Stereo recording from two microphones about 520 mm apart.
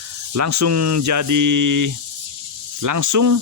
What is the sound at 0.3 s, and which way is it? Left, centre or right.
Speech, right.